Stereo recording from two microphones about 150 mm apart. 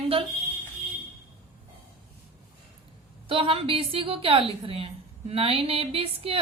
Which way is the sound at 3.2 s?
35° right (ahead or behind).